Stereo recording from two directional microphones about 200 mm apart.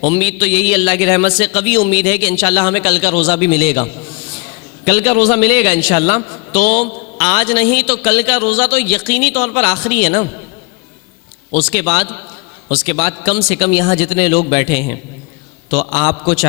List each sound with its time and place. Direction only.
0.1 s a man's voice: 5° right (ahead or behind)
3.8 s a sound: 5° right (ahead or behind)
4.9 s a man's voice: 5° right (ahead or behind)
6.1 s a man's voice: 20° left (ahead or behind)
6.5 s a man's voice: 5° right (ahead or behind)
11.6 s a man's voice: 5° right (ahead or behind)
16.0 s a man's voice: 25° left (ahead or behind)
16.2 s a man's voice: 5° right (ahead or behind)